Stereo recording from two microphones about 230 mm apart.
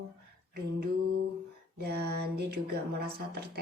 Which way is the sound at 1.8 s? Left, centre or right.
Right.